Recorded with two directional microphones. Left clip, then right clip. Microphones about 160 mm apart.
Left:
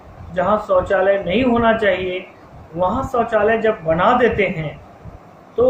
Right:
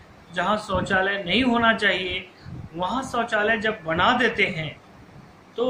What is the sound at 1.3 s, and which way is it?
Speech, 40° right (ahead or behind).